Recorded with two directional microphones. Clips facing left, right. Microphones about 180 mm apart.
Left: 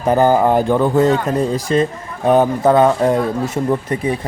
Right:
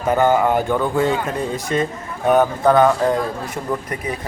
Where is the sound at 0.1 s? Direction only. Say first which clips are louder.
Left 3 dB; 35° left (ahead or behind).